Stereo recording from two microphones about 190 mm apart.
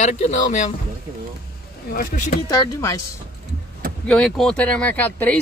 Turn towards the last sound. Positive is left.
turn(degrees=10)  # may be behind; listen again after turning